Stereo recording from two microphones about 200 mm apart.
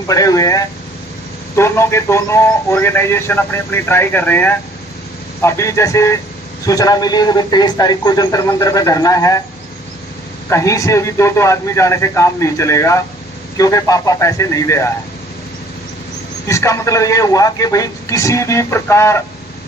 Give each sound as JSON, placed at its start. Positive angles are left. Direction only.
{"t": 0.1, "sound": "a man's voice", "side_deg": 15}
{"t": 10.5, "sound": "a man's voice", "side_deg": 15}
{"t": 16.5, "sound": "a man's voice", "side_deg": 15}